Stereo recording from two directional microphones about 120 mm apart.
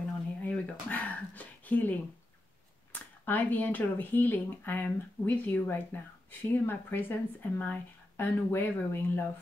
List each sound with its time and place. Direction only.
0.4 s speech: 15° left (ahead or behind)